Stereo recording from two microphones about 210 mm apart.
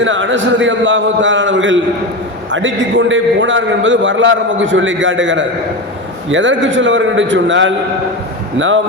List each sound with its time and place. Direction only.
0.0 s a man's voice: 65° right (ahead or behind)